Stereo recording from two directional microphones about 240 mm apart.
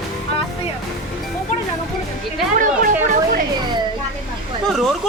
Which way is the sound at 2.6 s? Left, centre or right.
Right.